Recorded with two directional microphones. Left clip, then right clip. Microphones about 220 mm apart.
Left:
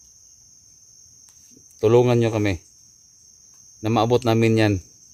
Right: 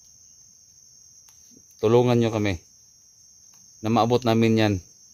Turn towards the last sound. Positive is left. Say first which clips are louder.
# left 2 dB
turn(degrees=0)  # may be behind; listen again after turning